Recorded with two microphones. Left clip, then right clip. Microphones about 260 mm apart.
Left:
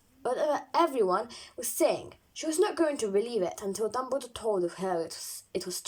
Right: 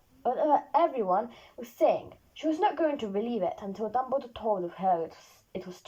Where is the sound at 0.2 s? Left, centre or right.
Left.